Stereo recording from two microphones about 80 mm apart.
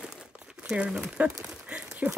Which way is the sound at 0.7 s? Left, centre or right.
Centre.